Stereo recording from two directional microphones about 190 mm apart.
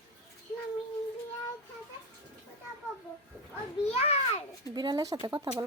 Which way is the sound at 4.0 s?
35° left (ahead or behind).